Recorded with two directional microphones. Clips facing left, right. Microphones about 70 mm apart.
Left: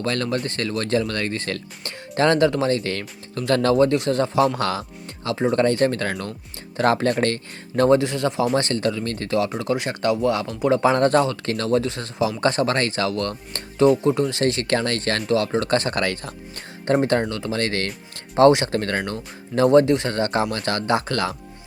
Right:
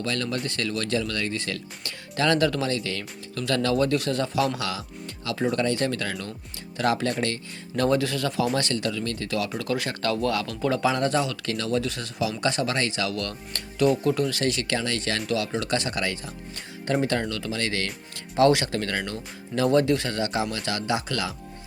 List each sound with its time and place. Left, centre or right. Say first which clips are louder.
0.0 s speech: left 4 dB; left
3.3 s speech: left 6 dB; left
7.9 s speech: left 5 dB; left
10.8 s speech: left 7 dB; left
17.0 s speech: left 5 dB; left
17.6 s speech: left 4 dB; left